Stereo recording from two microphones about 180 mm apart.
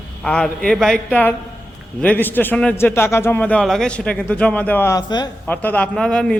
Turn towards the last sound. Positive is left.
turn(degrees=5)  # may be behind; listen again after turning